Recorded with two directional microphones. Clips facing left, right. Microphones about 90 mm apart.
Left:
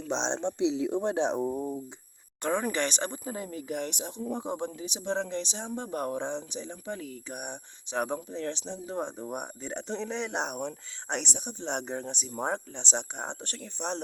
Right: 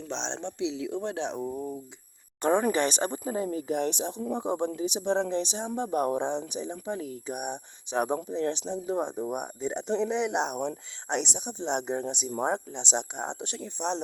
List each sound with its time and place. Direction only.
0.1 s speech: 20° left (ahead or behind)
2.4 s speech: 20° right (ahead or behind)
5.3 s speech: 20° right (ahead or behind)
7.3 s speech: 10° right (ahead or behind)